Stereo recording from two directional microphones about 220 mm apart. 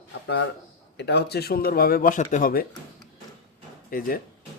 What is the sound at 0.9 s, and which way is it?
Speech, 50° left (ahead or behind).